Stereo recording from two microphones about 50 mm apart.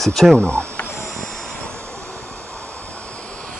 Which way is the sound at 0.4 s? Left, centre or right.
Right.